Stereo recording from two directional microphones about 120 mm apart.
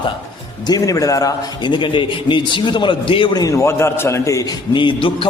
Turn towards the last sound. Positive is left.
turn(degrees=45)  # may be behind; listen again after turning